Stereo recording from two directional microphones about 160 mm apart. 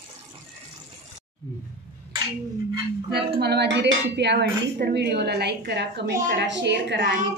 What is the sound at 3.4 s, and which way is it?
Speech, 90° right.